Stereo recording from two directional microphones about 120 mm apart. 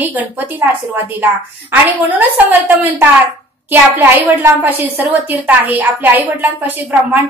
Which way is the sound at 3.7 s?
15° right (ahead or behind).